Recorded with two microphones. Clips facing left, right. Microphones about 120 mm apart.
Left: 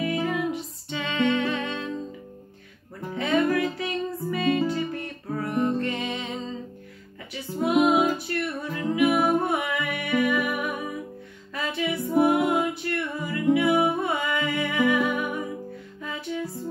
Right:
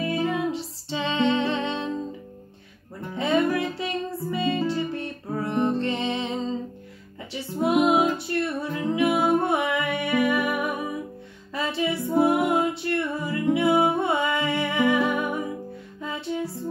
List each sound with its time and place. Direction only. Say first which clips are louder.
0.0 s music: right 1 dB; 25° right (ahead or behind)
3.2 s music: even; 25° right (ahead or behind)
8.3 s music: right 3 dB; 30° right (ahead or behind)